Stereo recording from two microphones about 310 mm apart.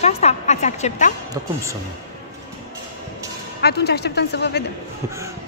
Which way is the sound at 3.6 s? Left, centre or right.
Left.